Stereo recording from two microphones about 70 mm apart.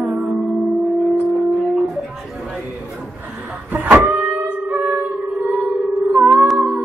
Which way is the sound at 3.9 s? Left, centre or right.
Right.